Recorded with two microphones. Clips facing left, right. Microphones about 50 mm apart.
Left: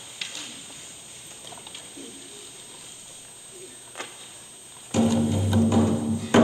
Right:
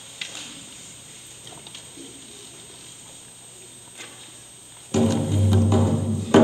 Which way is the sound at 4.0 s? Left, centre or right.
Left.